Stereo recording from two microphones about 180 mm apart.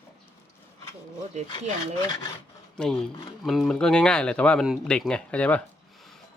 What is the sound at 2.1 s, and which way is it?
Filing, 20° left (ahead or behind).